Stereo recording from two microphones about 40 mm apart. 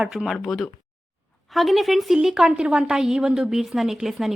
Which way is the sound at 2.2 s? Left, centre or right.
Centre.